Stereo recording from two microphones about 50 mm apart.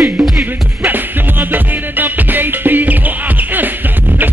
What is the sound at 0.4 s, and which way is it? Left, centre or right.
Music, right.